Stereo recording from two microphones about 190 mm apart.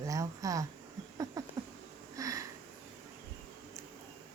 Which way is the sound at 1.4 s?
15° right (ahead or behind).